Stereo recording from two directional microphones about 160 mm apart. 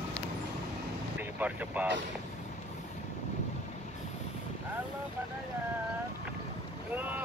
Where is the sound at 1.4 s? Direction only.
10° right (ahead or behind).